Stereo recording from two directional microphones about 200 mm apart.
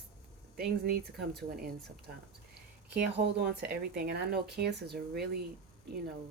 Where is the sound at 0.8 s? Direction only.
50° right (ahead or behind).